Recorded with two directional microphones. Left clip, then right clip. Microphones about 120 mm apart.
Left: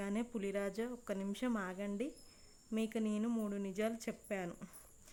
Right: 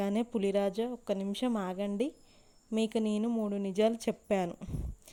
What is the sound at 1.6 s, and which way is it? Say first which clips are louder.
A woman's voice: right 8 dB; 40° right (ahead or behind).